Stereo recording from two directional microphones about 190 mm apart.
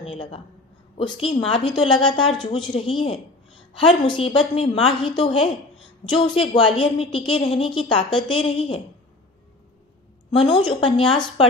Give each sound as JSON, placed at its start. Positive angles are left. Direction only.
{"t": 0.0, "sound": "a woman's voice", "side_deg": 30}
{"t": 4.0, "sound": "a woman's voice", "side_deg": 25}
{"t": 10.3, "sound": "a woman's voice", "side_deg": 30}